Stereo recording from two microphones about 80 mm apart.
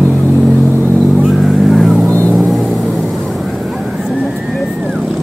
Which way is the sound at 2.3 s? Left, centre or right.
Centre.